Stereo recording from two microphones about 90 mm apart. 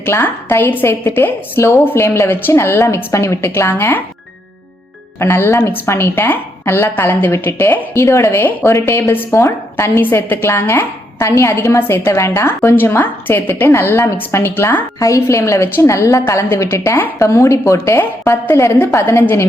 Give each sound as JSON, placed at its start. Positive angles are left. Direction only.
{"t": 0.0, "sound": "a woman's voice", "side_deg": 25}
{"t": 5.2, "sound": "a woman's voice", "side_deg": 30}
{"t": 14.9, "sound": "a woman's voice", "side_deg": 35}